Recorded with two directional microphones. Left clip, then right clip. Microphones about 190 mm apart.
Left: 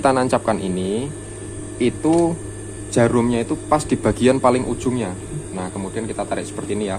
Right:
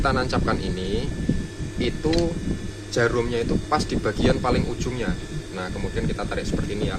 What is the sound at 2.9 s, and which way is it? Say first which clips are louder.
Speech: left 5 dB; 40° left (ahead or behind).